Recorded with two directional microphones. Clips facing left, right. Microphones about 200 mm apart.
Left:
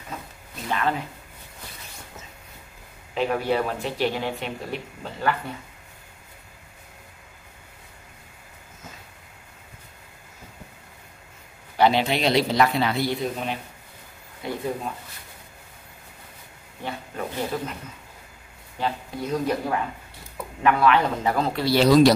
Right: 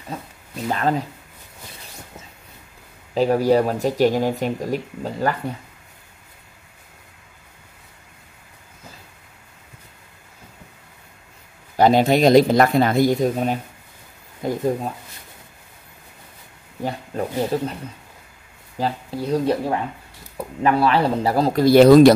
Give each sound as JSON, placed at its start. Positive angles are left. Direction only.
{"t": 0.7, "sound": "speech", "side_deg": -40}
{"t": 3.2, "sound": "speech", "side_deg": -35}
{"t": 11.7, "sound": "speech", "side_deg": -45}
{"t": 16.8, "sound": "speech", "side_deg": -35}
{"t": 18.8, "sound": "speech", "side_deg": -35}